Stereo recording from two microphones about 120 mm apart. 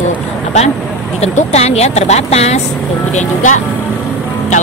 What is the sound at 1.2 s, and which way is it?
Speech, 65° left (ahead or behind).